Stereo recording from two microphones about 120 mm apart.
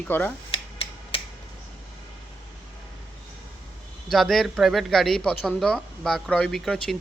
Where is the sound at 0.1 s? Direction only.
15° left (ahead or behind).